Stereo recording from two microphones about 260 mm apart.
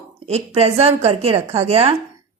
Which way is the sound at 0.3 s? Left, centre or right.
Right.